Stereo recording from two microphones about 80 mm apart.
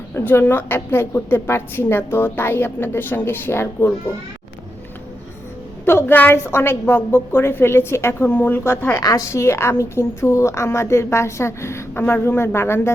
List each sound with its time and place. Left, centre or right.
0.1 s a woman's voice: left
5.8 s a woman's voice: left
9.0 s a woman's voice: left